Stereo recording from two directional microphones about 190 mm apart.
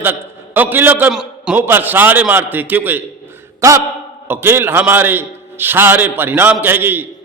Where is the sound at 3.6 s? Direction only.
15° right (ahead or behind).